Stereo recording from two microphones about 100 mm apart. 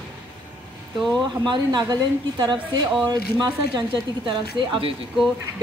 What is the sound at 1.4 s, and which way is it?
Speech, 50° right (ahead or behind).